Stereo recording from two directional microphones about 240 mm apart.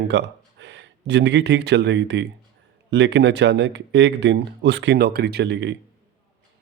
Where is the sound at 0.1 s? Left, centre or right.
Right.